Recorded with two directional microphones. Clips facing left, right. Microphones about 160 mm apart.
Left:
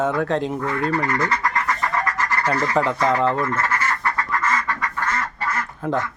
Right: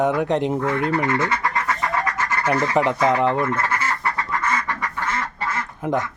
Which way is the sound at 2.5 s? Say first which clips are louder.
Right 2 dB; 15° right (ahead or behind).